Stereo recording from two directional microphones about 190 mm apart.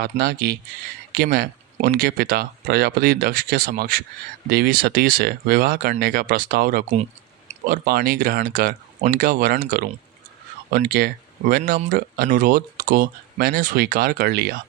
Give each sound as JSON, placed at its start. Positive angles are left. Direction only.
{"t": 0.0, "sound": "speech", "side_deg": -55}
{"t": 6.9, "sound": "clicking", "side_deg": -35}
{"t": 7.9, "sound": "speech", "side_deg": -50}